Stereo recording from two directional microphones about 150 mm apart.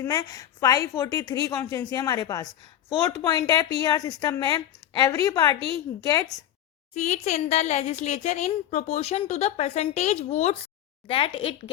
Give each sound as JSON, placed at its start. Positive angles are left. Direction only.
{"t": 0.0, "sound": "a woman's voice", "side_deg": 25}
{"t": 6.9, "sound": "speech", "side_deg": 50}